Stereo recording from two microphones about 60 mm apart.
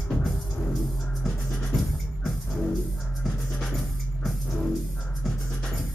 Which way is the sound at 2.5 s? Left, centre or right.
Centre.